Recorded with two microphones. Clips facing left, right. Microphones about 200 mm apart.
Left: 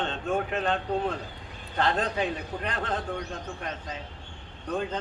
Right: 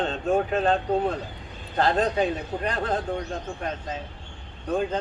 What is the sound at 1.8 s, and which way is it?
A man's voice, 40° right (ahead or behind).